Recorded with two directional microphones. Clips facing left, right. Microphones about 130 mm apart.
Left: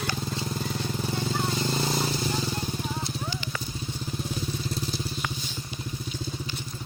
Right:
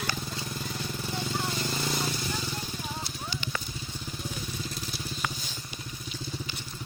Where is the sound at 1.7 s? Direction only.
30° left (ahead or behind).